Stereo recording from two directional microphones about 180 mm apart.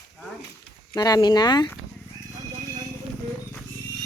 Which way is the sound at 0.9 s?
20° left (ahead or behind).